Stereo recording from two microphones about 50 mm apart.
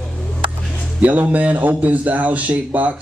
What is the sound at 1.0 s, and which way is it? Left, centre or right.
Speech, right.